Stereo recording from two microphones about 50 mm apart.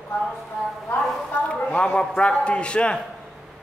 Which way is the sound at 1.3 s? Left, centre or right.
Left.